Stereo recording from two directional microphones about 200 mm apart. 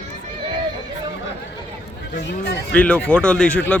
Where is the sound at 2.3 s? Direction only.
55° left (ahead or behind).